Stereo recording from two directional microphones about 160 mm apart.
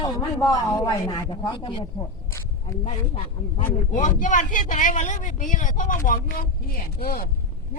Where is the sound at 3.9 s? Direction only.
50° left (ahead or behind).